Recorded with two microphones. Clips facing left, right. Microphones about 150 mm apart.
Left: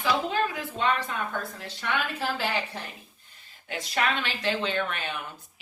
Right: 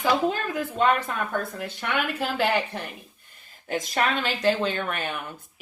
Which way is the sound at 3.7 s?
45° right (ahead or behind).